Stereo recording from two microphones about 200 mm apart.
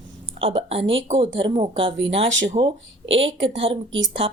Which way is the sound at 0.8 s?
70° right (ahead or behind).